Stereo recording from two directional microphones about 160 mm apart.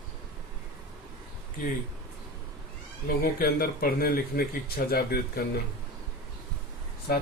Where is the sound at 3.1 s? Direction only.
70° left (ahead or behind).